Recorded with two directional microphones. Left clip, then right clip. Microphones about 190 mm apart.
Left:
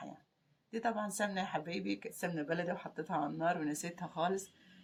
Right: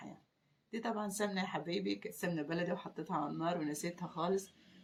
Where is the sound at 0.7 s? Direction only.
45° left (ahead or behind).